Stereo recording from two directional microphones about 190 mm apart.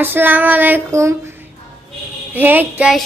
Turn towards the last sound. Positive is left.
turn(degrees=-5)  # may be behind; listen again after turning